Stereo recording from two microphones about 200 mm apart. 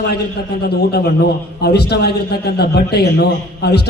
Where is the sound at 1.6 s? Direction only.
55° left (ahead or behind).